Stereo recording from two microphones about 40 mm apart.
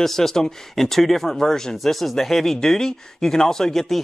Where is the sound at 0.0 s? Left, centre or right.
Centre.